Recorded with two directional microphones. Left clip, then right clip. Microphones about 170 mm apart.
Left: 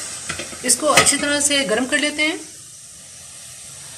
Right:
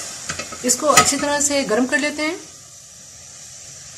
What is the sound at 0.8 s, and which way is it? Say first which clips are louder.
Speech: even; 60° right (ahead or behind).